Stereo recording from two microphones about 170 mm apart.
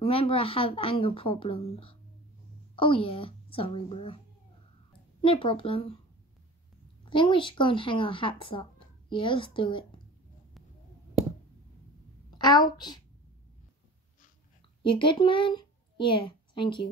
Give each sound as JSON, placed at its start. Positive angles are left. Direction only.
{"t": 0.0, "sound": "a woman's voice", "side_deg": 30}
{"t": 5.2, "sound": "a woman's voice", "side_deg": 30}
{"t": 7.1, "sound": "speech", "side_deg": 30}
{"t": 12.3, "sound": "a woman's voice", "side_deg": 25}
{"t": 14.8, "sound": "a woman's voice", "side_deg": 30}